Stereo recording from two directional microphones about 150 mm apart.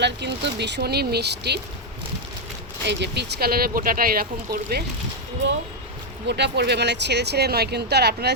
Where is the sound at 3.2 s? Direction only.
90° right.